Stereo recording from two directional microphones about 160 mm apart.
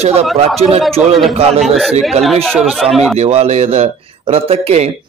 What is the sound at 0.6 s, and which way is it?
Speech, 40° right (ahead or behind).